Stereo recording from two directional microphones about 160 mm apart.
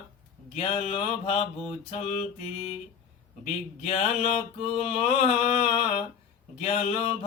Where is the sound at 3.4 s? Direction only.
40° left (ahead or behind).